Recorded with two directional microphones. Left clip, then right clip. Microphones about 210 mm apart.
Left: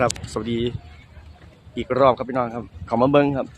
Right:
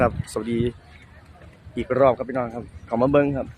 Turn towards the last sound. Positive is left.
turn(degrees=20)  # may be behind; listen again after turning